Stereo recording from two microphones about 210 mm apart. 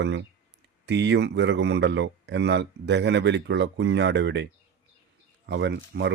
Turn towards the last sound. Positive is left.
turn(degrees=-55)  # may be behind; listen again after turning